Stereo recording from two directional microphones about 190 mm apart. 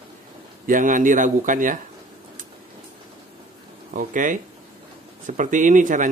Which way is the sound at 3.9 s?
45° right (ahead or behind).